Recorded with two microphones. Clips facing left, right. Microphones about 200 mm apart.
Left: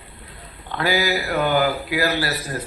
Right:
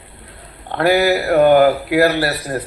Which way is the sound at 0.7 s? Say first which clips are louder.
Right 7 dB; 60° right (ahead or behind).